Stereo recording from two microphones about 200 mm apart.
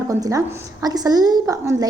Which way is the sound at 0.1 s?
15° right (ahead or behind).